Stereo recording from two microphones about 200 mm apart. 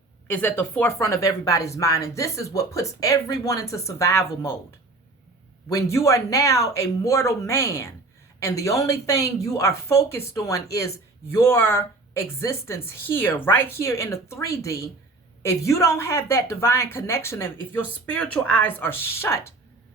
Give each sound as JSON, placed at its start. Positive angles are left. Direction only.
{"t": 0.3, "sound": "speech", "side_deg": 10}
{"t": 5.6, "sound": "speech", "side_deg": 15}